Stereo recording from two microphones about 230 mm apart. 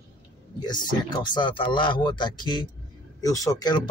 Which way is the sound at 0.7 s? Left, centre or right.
Centre.